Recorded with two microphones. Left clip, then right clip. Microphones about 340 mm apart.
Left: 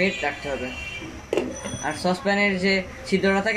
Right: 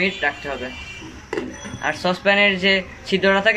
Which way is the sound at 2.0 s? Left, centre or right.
Right.